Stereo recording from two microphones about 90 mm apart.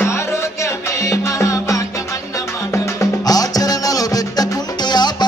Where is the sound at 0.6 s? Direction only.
35° left (ahead or behind).